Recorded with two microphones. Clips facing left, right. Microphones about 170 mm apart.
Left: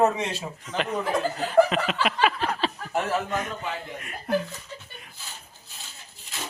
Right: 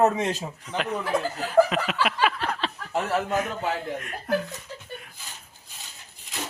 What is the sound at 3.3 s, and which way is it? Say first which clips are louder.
Speech: right 4 dB; 5° right (ahead or behind).